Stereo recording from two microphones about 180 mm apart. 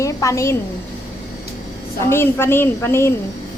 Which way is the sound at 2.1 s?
15° left (ahead or behind).